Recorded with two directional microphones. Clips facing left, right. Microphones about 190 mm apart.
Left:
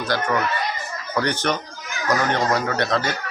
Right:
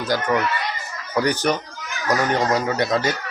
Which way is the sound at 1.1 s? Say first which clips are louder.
Right 3 dB; 10° right (ahead or behind).